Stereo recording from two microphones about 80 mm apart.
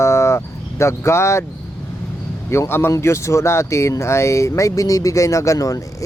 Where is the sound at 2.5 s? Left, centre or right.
Left.